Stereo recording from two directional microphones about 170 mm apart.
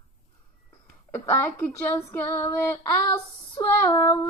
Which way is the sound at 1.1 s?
10° left (ahead or behind).